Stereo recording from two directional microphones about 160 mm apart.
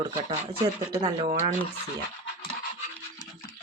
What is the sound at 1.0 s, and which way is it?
Speech, 35° right (ahead or behind).